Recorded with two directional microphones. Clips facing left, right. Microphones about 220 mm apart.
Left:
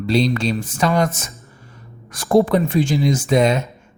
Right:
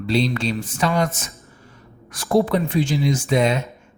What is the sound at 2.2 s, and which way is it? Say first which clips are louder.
Speech: left 3 dB; 45° left (ahead or behind).